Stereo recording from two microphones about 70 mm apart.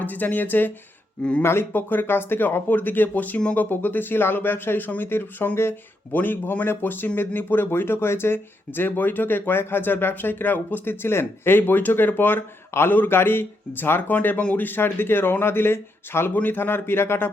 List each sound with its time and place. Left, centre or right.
0.0 s speech: left